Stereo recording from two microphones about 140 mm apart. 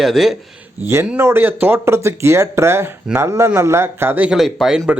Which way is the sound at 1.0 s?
15° right (ahead or behind).